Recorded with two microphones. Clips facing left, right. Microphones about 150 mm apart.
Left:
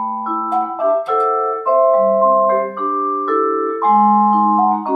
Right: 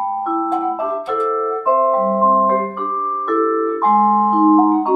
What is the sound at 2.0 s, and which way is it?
Music, 25° right (ahead or behind).